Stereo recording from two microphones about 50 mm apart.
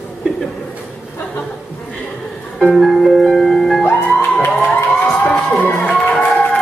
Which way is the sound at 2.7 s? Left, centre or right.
Centre.